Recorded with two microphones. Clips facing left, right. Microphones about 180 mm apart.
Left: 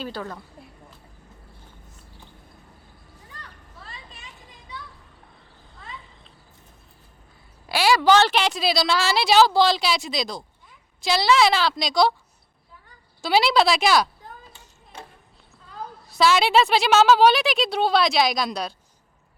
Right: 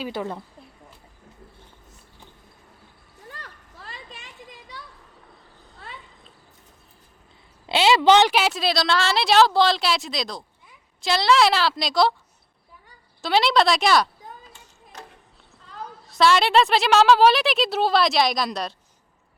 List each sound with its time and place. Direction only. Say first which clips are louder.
0.1 s a woman's voice: right 4 dB; 20° right (ahead or behind)
7.7 s a woman's voice: right 1 dB; 20° right (ahead or behind)
8.3 s a woman's voice: even; 5° right (ahead or behind)
13.2 s a woman's voice: even; 5° left (ahead or behind)
16.0 s a woman's voice: right 1 dB; centre (ahead or behind)